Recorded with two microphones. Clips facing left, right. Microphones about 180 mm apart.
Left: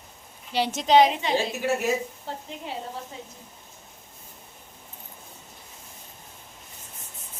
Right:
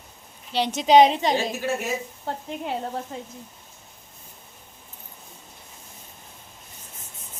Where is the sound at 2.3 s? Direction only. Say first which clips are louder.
Right 5 dB; 55° right (ahead or behind).